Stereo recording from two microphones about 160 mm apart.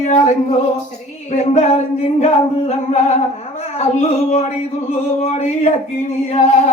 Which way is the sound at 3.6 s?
45° left (ahead or behind).